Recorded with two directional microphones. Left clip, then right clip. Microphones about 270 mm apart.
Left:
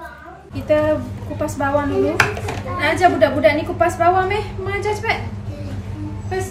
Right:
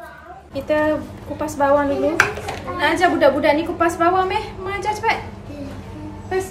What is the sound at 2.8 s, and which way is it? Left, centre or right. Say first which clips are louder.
A woman's voice: left 1 dB; centre.